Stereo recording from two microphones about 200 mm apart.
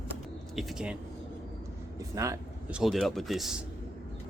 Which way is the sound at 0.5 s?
5° right (ahead or behind).